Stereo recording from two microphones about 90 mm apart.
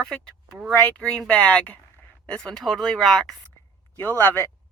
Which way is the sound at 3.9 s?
25° left (ahead or behind).